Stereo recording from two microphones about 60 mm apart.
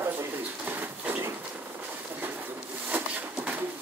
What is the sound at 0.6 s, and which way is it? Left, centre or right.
Pigeon, right.